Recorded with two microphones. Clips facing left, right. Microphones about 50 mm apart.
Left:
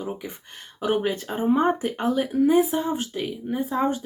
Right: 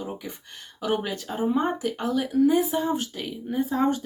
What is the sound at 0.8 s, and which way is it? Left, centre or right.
Speech, left.